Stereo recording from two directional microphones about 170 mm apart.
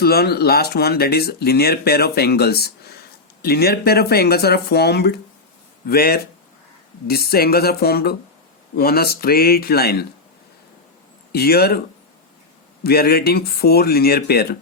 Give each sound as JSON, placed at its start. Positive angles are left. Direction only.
{"t": 0.0, "sound": "speech", "side_deg": 65}
{"t": 11.3, "sound": "speech", "side_deg": 70}
{"t": 12.8, "sound": "speech", "side_deg": 65}